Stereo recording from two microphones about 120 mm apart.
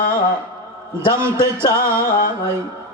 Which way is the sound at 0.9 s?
20° right (ahead or behind).